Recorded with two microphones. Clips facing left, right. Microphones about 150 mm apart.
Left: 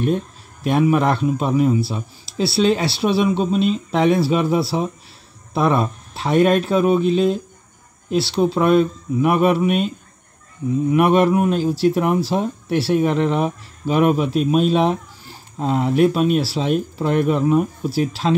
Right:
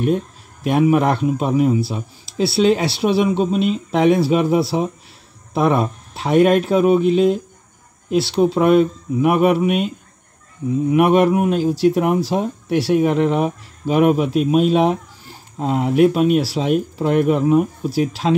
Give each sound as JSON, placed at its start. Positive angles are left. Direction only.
{"t": 0.7, "sound": "speech", "side_deg": -15}